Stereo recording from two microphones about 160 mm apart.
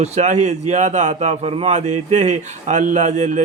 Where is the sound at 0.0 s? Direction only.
45° right (ahead or behind).